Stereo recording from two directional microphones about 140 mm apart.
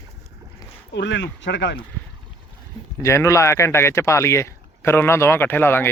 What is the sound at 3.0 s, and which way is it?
Speech, 20° left (ahead or behind).